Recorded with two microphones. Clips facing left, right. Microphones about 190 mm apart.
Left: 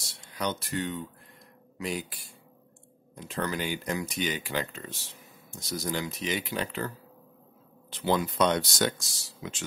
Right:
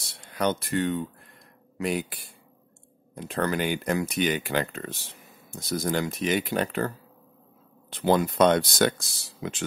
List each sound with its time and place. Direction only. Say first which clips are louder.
0.3 s speech: right 6 dB; 55° right (ahead or behind)
3.2 s speech: right 5 dB; 55° right (ahead or behind)
7.9 s speech: right 5 dB; 50° right (ahead or behind)